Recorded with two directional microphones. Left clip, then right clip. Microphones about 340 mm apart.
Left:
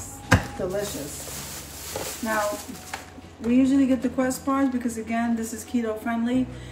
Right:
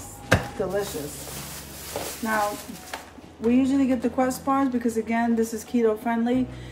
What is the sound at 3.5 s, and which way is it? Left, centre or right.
Speech, centre.